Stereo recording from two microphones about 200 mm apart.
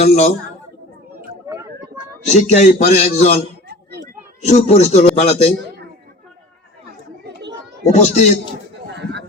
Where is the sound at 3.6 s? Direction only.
55° right (ahead or behind).